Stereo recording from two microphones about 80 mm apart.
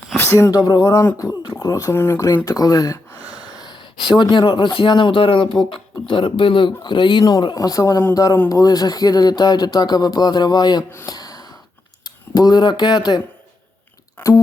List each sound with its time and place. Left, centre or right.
0.2 s speech: left
1.9 s speech: left
2.2 s a sound: left
4.1 s a man's voice: left
11.0 s a sound: left
12.0 s speech: left
14.2 s speech: left